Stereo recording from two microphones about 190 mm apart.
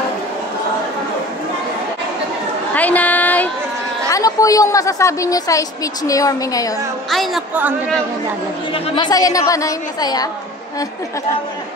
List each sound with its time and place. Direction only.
2.7 s a sound: 10° left (ahead or behind)
4.1 s a woman's voice: 15° left (ahead or behind)
7.1 s a woman's voice: centre (ahead or behind)
8.7 s a woman's voice: 25° left (ahead or behind)